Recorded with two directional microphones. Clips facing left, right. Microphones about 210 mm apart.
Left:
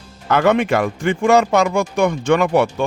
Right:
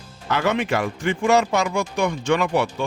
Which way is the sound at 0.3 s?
55° left (ahead or behind).